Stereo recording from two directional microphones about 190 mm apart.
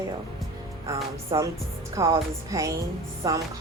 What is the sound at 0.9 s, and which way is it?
Speech, 15° right (ahead or behind).